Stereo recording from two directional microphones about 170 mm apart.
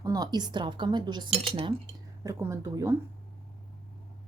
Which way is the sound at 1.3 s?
35° right (ahead or behind).